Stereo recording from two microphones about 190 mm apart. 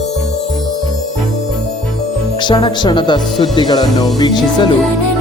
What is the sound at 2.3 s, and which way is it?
Speech, 25° left (ahead or behind).